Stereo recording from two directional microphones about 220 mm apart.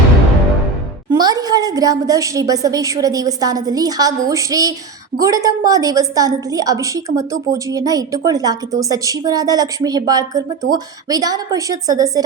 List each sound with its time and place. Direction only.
1.1 s a woman's voice: 15° right (ahead or behind)